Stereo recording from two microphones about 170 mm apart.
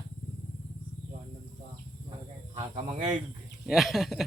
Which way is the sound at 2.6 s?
45° right (ahead or behind).